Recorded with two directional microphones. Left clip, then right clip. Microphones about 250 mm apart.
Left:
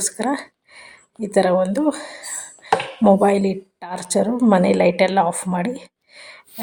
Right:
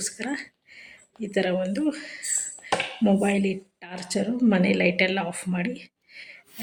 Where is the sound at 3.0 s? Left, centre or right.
Left.